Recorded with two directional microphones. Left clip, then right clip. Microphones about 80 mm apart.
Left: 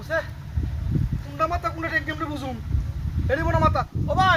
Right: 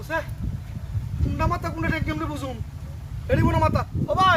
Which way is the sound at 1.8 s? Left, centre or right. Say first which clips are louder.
Left 2 dB; centre.